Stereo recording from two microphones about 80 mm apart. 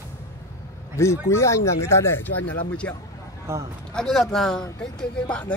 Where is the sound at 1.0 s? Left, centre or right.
Left.